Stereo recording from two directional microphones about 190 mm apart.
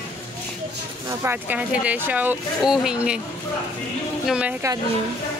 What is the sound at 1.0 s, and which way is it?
Speech, 10° right (ahead or behind).